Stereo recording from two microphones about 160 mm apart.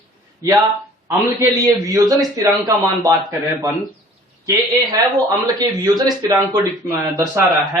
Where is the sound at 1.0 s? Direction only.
20° right (ahead or behind).